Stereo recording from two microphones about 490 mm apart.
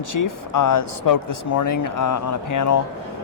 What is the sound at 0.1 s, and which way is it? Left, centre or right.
Speech, left.